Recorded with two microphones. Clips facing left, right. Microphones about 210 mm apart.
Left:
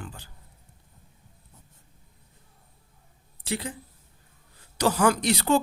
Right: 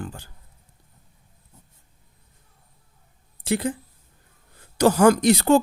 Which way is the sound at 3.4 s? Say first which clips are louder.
Right 8 dB; 50° right (ahead or behind).